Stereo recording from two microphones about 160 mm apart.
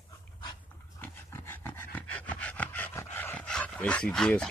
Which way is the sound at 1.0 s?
15° left (ahead or behind).